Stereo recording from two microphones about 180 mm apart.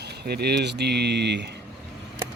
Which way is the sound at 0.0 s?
65° right (ahead or behind).